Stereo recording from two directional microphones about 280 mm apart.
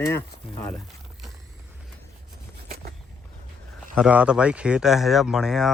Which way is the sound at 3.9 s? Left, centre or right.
Centre.